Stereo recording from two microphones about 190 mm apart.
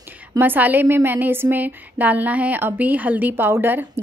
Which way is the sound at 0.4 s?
10° right (ahead or behind).